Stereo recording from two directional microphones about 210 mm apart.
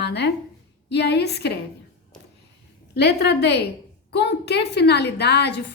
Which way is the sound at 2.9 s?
50° left (ahead or behind).